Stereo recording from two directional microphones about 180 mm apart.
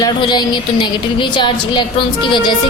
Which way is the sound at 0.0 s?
25° left (ahead or behind).